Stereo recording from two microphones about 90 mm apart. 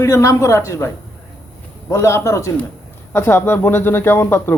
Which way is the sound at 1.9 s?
30° left (ahead or behind).